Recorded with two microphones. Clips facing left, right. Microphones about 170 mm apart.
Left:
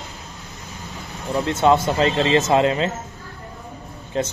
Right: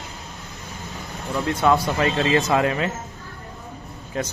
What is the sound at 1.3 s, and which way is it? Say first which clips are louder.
Speech: left 3 dB; 25° left (ahead or behind).